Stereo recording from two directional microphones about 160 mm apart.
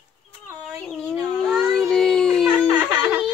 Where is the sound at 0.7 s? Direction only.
5° left (ahead or behind).